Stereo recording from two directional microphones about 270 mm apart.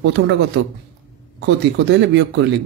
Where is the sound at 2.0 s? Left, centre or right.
Right.